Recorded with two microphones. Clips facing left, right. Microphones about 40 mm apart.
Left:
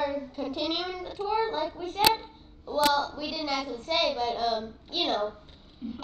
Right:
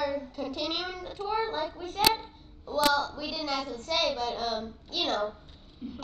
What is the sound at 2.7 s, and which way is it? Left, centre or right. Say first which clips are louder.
A child's voice: left 1 dB; left.